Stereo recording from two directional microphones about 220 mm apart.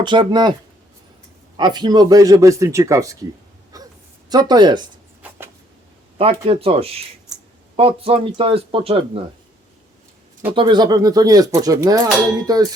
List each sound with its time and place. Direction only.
0.0 s speech: 20° right (ahead or behind)
1.5 s speech: 20° right (ahead or behind)
3.7 s a sound: 15° right (ahead or behind)
4.3 s speech: 20° right (ahead or behind)
5.2 s a sound: 5° right (ahead or behind)
6.4 s speech: 25° right (ahead or behind)
10.5 s speech: 20° right (ahead or behind)